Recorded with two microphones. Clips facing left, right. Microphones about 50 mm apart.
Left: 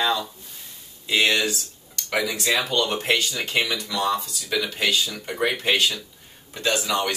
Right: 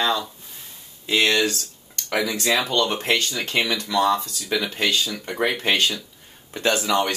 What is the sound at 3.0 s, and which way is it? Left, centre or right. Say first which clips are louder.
Speech: even; centre.